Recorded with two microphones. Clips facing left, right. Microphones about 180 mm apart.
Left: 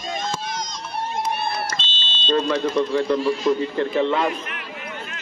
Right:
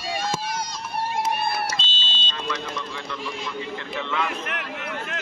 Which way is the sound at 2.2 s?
45° left (ahead or behind).